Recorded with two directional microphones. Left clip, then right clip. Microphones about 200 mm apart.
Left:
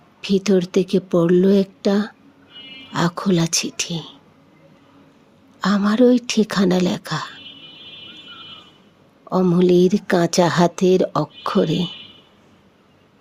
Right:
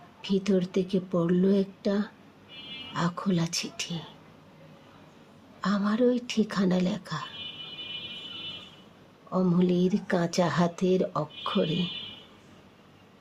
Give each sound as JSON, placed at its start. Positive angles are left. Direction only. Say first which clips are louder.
{"t": 0.2, "sound": "a woman's voice", "louder": "left 9 dB", "side_deg": 40}
{"t": 5.5, "sound": "speech", "louder": "left 10 dB", "side_deg": 40}
{"t": 9.3, "sound": "speech", "louder": "left 11 dB", "side_deg": 40}